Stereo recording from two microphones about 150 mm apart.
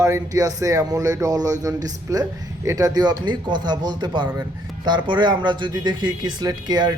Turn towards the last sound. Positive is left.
turn(degrees=-25)  # may be behind; listen again after turning